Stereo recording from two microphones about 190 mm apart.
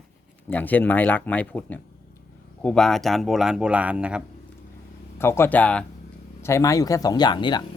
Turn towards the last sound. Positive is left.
turn(degrees=25)  # may be behind; listen again after turning